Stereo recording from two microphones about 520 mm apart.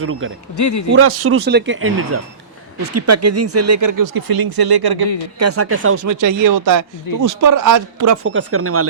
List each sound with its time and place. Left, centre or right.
0.0 s speech: right
0.5 s a man's voice: left
0.9 s speech: right
5.4 s speech: right
6.1 s speech: right